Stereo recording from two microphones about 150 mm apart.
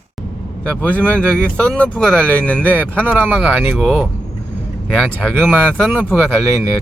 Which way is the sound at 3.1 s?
10° right (ahead or behind).